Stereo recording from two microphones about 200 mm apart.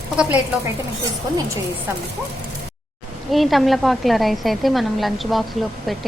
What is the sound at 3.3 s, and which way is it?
A woman's voice, centre (ahead or behind).